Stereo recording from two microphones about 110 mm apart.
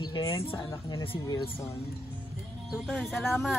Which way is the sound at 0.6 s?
35° left (ahead or behind).